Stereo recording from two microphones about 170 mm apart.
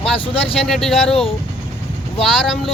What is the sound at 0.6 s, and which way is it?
Speech, centre (ahead or behind).